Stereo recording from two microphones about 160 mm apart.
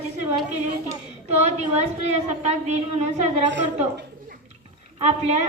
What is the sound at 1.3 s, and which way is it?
A woman's voice, 45° right (ahead or behind).